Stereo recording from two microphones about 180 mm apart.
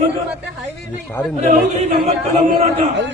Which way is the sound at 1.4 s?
55° right (ahead or behind).